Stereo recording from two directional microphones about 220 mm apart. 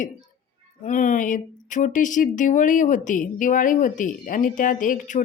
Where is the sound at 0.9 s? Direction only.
35° left (ahead or behind).